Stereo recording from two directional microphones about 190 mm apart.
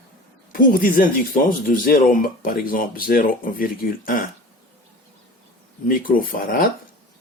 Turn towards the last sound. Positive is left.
turn(degrees=50)  # may be behind; listen again after turning